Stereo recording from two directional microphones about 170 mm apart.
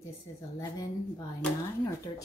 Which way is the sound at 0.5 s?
20° left (ahead or behind).